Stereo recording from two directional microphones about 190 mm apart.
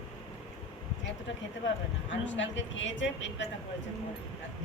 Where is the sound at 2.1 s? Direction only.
75° left (ahead or behind).